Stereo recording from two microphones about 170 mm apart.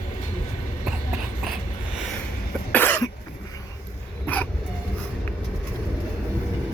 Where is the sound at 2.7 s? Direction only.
10° left (ahead or behind).